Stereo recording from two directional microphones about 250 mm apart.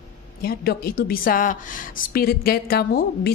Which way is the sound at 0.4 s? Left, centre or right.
Left.